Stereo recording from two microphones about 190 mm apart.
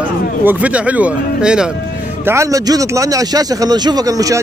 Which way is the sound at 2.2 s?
15° right (ahead or behind).